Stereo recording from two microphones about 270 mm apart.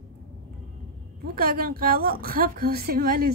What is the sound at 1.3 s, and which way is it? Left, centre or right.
A woman's voice, right.